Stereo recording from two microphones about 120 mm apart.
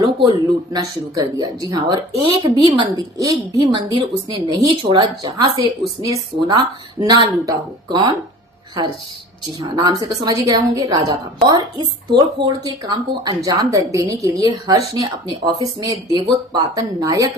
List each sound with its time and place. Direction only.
0.0 s speech: 40° right (ahead or behind)
9.6 s speech: 35° right (ahead or behind)